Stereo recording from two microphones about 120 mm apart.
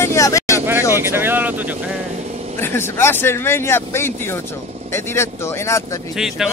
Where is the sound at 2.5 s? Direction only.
20° left (ahead or behind).